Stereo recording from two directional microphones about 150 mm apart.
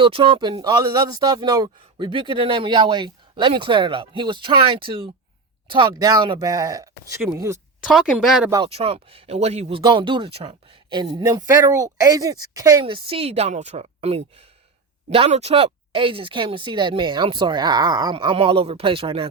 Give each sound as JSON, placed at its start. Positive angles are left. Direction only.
{"t": 0.0, "sound": "speech", "side_deg": -35}
{"t": 7.9, "sound": "speech", "side_deg": 0}
{"t": 8.6, "sound": "a woman's voice", "side_deg": -40}
{"t": 9.8, "sound": "speech", "side_deg": -30}
{"t": 12.8, "sound": "a woman's voice", "side_deg": -40}